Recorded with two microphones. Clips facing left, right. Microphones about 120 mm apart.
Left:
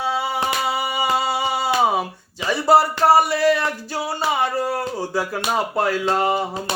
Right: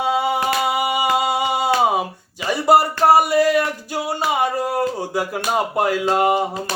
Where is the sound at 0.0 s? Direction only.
20° right (ahead or behind).